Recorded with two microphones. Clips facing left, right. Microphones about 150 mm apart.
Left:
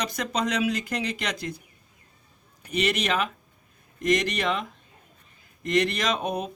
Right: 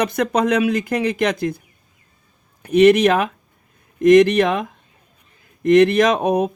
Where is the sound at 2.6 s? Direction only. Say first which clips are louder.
Right 14 dB; 55° right (ahead or behind).